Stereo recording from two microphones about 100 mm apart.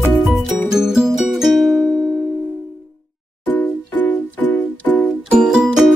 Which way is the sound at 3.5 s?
15° left (ahead or behind).